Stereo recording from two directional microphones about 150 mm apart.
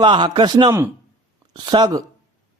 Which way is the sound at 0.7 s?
20° right (ahead or behind).